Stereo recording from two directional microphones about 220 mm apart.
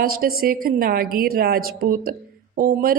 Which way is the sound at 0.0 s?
40° right (ahead or behind).